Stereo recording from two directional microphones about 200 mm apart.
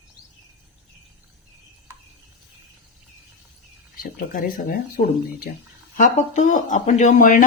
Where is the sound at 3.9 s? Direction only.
45° left (ahead or behind).